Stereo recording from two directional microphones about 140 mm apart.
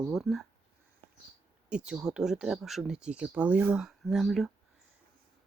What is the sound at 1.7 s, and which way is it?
Speech, 5° right (ahead or behind).